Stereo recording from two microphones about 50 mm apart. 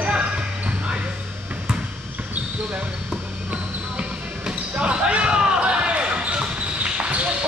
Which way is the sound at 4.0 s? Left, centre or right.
Right.